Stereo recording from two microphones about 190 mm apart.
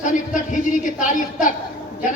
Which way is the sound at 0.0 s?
40° left (ahead or behind).